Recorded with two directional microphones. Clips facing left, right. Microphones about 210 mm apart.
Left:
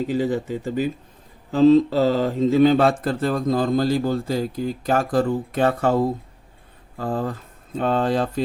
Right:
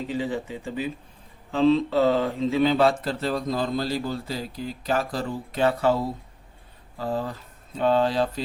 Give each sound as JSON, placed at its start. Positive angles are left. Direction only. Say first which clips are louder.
{"t": 0.1, "sound": "speech", "louder": "left 6 dB", "side_deg": 40}